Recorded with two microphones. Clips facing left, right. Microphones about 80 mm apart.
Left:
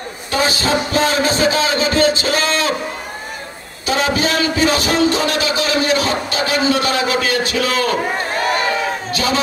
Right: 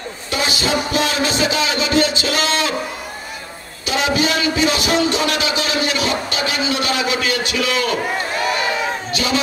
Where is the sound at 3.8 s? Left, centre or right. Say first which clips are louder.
Left 1 dB; left.